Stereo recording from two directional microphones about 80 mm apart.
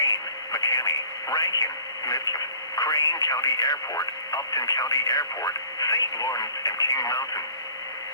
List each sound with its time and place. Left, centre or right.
0.5 s speech: left
2.7 s speech: left